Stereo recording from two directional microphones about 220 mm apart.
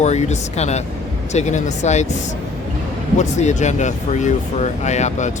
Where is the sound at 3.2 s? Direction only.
30° left (ahead or behind).